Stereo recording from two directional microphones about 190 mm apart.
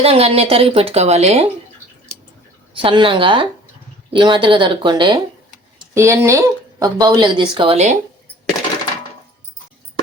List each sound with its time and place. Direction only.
0.0 s speech: 30° right (ahead or behind)
2.7 s speech: 25° right (ahead or behind)